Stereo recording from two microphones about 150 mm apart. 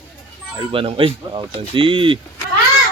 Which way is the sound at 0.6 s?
35° right (ahead or behind).